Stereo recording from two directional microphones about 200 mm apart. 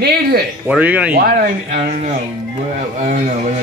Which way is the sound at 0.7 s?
10° right (ahead or behind).